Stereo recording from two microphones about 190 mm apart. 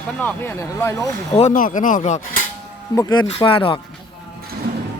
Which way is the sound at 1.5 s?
45° left (ahead or behind).